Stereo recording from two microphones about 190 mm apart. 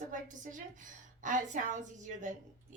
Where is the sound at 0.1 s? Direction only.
45° right (ahead or behind).